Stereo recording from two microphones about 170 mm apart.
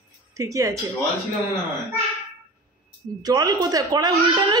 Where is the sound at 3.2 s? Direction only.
20° right (ahead or behind).